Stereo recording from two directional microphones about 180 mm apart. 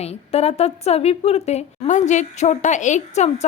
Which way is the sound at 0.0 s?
35° left (ahead or behind).